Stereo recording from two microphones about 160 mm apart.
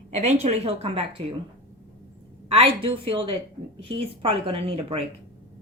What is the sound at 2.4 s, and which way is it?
A woman's voice, 35° right (ahead or behind).